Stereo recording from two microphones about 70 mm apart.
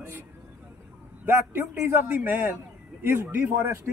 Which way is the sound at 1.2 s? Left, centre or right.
Right.